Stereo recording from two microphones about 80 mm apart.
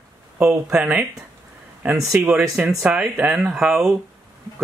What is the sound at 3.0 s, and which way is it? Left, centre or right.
Speech, right.